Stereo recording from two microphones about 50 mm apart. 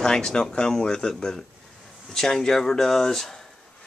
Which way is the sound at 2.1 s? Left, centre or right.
Centre.